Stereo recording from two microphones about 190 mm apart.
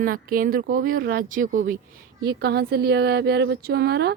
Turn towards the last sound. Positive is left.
turn(degrees=-60)  # may be behind; listen again after turning